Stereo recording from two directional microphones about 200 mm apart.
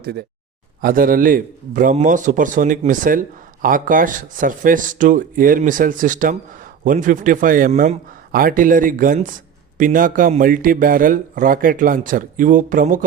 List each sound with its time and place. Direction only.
0.0 s a man's voice: 55° right (ahead or behind)